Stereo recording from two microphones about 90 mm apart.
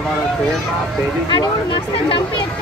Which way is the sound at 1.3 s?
70° left (ahead or behind).